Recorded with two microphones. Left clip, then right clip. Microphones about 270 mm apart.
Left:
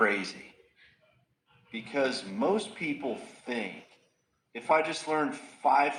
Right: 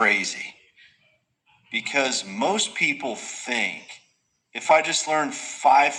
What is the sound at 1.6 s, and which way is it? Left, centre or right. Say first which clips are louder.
Speech: right 7 dB; right.